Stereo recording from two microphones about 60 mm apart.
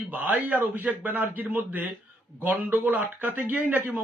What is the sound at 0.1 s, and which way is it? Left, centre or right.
Speech, right.